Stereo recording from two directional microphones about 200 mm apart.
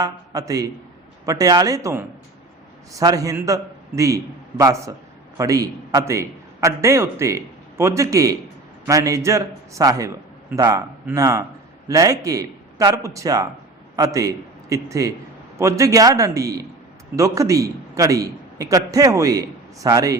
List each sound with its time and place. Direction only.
0.0 s a man's voice: 15° right (ahead or behind)